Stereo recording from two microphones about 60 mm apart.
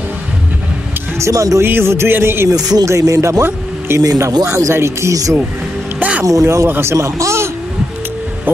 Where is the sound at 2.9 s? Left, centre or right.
Right.